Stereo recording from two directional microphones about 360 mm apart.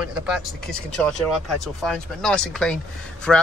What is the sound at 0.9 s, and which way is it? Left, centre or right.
Speech, centre.